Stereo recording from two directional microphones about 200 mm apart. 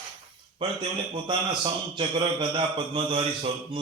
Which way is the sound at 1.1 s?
25° right (ahead or behind).